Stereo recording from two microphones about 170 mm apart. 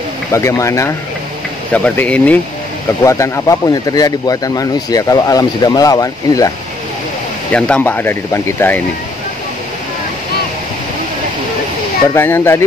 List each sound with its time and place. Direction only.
0.3 s speech: 15° left (ahead or behind)
7.5 s speech: 5° left (ahead or behind)
12.1 s speech: 15° left (ahead or behind)